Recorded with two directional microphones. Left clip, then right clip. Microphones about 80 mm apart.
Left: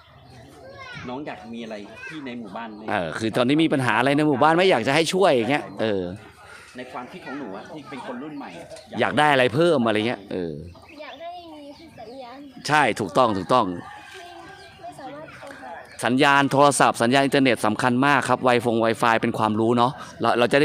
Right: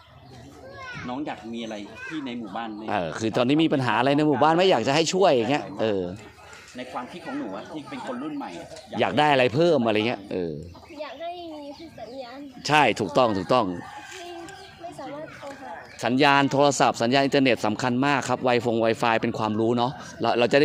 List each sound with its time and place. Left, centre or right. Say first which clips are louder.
1.0 s speech: right 1 dB; left
2.9 s speech: left 2 dB; left
4.4 s speech: left 3 dB; left
7.3 s speech: right 1 dB; centre
9.0 s speech: left 2 dB; left
9.9 s speech: left 1 dB; left
12.6 s speech: even; left
16.0 s speech: left 2 dB; left
17.4 s speech: left 2 dB; left
18.8 s speech: left 2 dB; left